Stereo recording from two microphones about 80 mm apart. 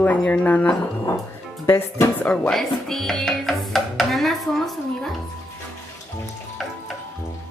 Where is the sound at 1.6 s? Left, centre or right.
Left.